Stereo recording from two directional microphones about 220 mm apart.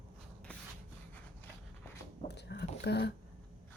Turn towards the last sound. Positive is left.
turn(degrees=50)  # may be behind; listen again after turning